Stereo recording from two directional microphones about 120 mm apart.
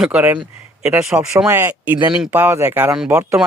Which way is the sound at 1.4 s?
20° right (ahead or behind).